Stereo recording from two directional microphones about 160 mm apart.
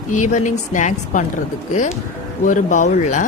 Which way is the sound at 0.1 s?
50° left (ahead or behind).